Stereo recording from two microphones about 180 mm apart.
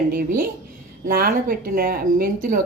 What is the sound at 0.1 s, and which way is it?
Speech, 55° right (ahead or behind).